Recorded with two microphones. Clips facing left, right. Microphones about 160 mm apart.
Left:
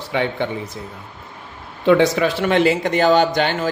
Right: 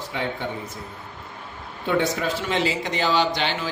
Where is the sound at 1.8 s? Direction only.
90° left; by 3.7 s 50° left (ahead or behind).